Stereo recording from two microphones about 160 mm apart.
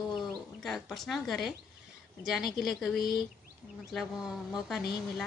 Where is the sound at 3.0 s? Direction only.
70° left (ahead or behind).